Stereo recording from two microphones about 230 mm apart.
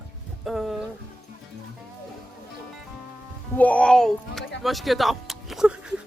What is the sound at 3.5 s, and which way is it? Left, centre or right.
Speech, centre.